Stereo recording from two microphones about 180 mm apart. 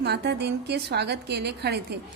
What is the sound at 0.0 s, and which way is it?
A woman's voice, 70° right (ahead or behind).